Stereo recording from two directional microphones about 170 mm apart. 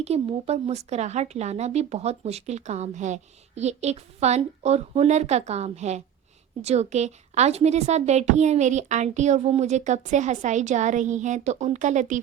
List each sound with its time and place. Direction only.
0.0 s a woman's voice: 35° right (ahead or behind)